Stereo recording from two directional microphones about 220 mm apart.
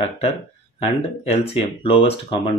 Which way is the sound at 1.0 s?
25° left (ahead or behind).